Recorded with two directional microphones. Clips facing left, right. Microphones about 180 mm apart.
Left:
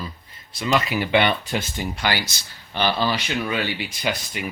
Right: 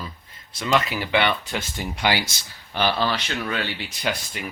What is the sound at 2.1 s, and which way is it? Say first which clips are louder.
Speech: right 2 dB; 15° right (ahead or behind).